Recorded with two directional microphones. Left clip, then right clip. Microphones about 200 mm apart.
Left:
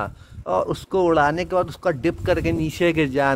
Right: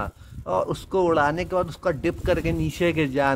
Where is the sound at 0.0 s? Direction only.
25° left (ahead or behind).